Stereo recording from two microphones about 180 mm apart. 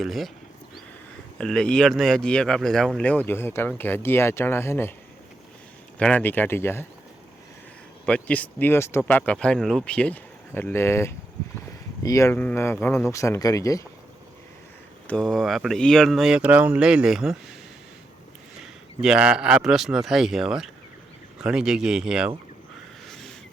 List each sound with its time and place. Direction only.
0.0 s speech: centre (ahead or behind)
1.4 s speech: 5° left (ahead or behind)
6.0 s speech: 10° left (ahead or behind)
8.0 s speech: 5° left (ahead or behind)
15.0 s speech: 5° left (ahead or behind)
18.6 s speech: 5° right (ahead or behind)
23.0 s a sound: centre (ahead or behind)